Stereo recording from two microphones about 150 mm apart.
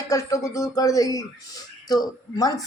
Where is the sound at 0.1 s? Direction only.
20° left (ahead or behind).